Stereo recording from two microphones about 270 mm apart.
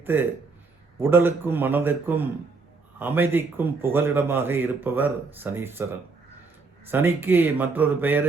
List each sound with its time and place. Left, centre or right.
0.0 s a man's voice: centre